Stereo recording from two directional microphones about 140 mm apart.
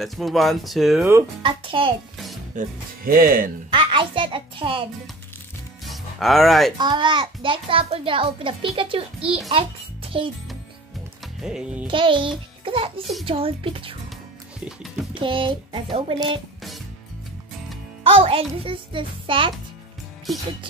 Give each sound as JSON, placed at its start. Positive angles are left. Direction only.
{"t": 0.0, "sound": "speech", "side_deg": 0}
{"t": 1.4, "sound": "a child's voice", "side_deg": -35}
{"t": 2.5, "sound": "speech", "side_deg": -90}
{"t": 3.7, "sound": "a child's voice", "side_deg": -35}
{"t": 5.9, "sound": "music", "side_deg": 0}
{"t": 6.8, "sound": "a child's voice", "side_deg": -35}
{"t": 11.4, "sound": "music", "side_deg": -5}
{"t": 11.9, "sound": "a child's voice", "side_deg": -35}
{"t": 15.1, "sound": "a child's voice", "side_deg": -35}
{"t": 18.0, "sound": "a child's voice", "side_deg": -40}